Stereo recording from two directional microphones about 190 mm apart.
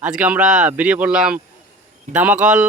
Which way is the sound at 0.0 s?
5° right (ahead or behind).